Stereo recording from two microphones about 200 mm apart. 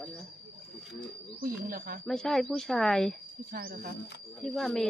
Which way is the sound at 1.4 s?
45° right (ahead or behind).